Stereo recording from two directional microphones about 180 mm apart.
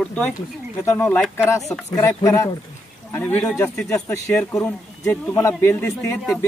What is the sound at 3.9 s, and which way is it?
A man's voice, 15° left (ahead or behind).